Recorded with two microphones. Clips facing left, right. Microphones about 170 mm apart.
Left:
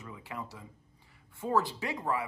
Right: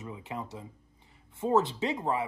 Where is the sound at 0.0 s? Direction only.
20° right (ahead or behind).